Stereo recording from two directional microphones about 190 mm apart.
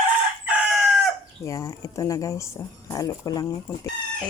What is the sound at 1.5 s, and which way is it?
Speech, 15° left (ahead or behind).